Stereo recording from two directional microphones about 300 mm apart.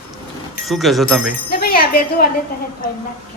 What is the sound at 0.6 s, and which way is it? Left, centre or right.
Speech, centre.